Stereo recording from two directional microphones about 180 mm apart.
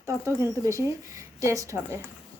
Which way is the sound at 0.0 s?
15° right (ahead or behind).